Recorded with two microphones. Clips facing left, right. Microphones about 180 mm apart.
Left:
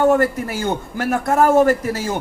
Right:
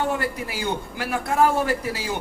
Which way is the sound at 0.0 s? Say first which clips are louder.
Left 10 dB; 50° left (ahead or behind).